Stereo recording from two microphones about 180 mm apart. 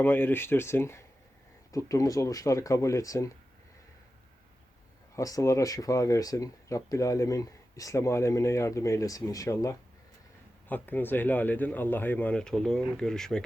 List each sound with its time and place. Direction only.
0.0 s speech: 10° left (ahead or behind)
5.1 s speech: 15° left (ahead or behind)